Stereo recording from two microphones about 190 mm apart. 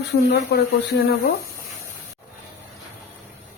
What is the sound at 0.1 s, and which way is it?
Speech, 60° left (ahead or behind).